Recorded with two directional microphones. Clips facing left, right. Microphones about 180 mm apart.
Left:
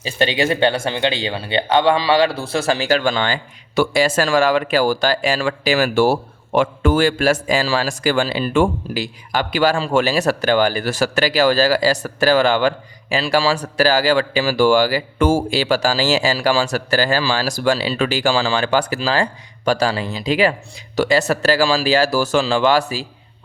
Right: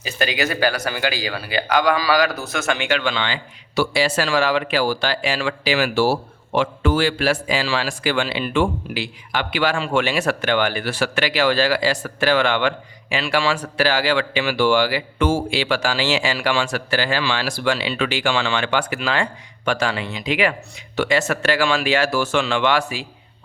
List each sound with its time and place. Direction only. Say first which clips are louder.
0.0 s speech: left 4 dB; 30° left (ahead or behind)